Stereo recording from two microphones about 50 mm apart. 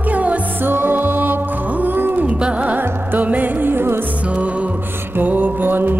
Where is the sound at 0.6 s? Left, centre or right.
Right.